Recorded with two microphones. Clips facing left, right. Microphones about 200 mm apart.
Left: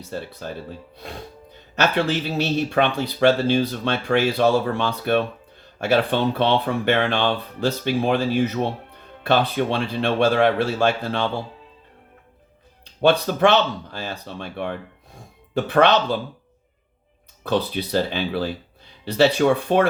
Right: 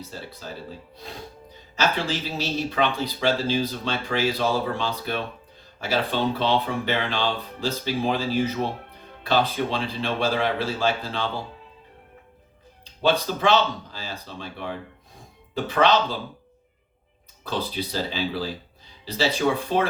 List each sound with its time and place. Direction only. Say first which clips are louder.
0.1 s speech: left 10 dB; 60° left (ahead or behind)
1.7 s speech: left 4 dB; 60° left (ahead or behind)
9.2 s speech: left 3 dB; 60° left (ahead or behind)
13.0 s speech: left 5 dB; 60° left (ahead or behind)
17.5 s speech: left 7 dB; 60° left (ahead or behind)